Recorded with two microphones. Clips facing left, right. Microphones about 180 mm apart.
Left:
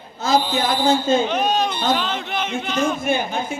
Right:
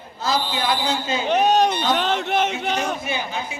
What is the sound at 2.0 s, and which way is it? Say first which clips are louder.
Speech: right 3 dB; 70° right (ahead or behind).